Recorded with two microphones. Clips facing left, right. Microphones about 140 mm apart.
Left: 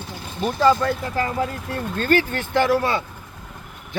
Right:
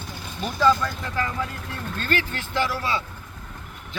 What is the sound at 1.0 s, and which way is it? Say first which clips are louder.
A man's voice: left 5 dB; 30° left (ahead or behind).